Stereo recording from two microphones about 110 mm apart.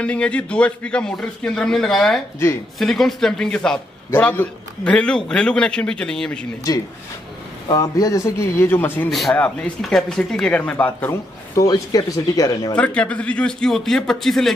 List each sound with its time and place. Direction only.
0.0 s a man's voice: 10° left (ahead or behind)
6.7 s a man's voice: 35° left (ahead or behind); by 9.7 s 15° left (ahead or behind)
9.8 s a man's voice: 5° left (ahead or behind)
11.5 s speech: 35° left (ahead or behind)
12.7 s a man's voice: 10° left (ahead or behind)